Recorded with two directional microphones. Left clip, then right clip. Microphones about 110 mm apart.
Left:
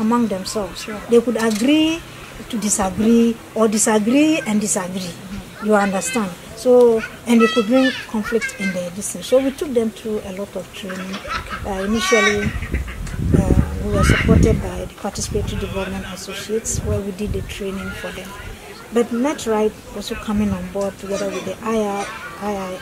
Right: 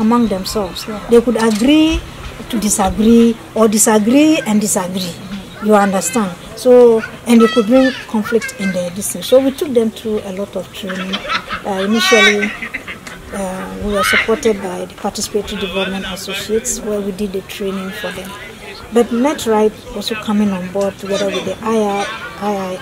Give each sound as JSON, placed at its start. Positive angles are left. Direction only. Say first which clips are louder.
{"t": 0.0, "sound": "a woman's voice", "louder": "right 5 dB", "side_deg": -15}
{"t": 10.9, "sound": "speech", "louder": "right 8 dB", "side_deg": -25}
{"t": 15.7, "sound": "speech", "louder": "right 7 dB", "side_deg": -20}
{"t": 21.5, "sound": "speech", "louder": "right 5 dB", "side_deg": -10}